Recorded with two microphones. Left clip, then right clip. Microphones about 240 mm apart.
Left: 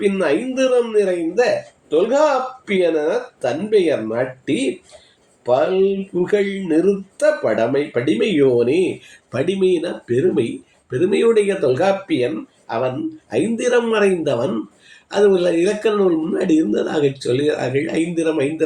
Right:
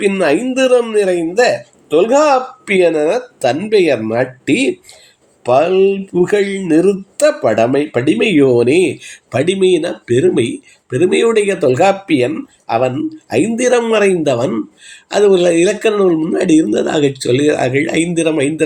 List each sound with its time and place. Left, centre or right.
0.0 s speech: right